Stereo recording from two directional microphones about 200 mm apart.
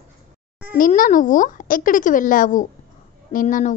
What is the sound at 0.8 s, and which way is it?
A woman's voice, 40° left (ahead or behind).